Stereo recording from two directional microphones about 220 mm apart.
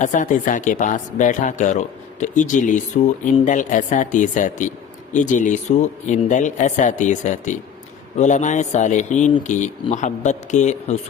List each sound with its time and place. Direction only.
0.0 s a man's voice: 35° left (ahead or behind)